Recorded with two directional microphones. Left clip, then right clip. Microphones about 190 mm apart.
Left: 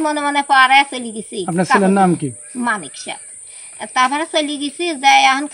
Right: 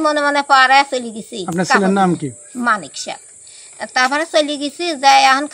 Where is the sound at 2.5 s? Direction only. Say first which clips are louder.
Right 4 dB; 5° right (ahead or behind).